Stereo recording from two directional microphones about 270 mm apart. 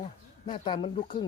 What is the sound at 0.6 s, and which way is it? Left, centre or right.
Speech, centre.